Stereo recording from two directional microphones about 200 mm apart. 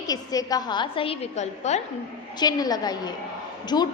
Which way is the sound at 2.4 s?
20° left (ahead or behind).